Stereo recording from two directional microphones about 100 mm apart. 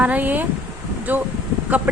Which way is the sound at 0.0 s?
15° right (ahead or behind).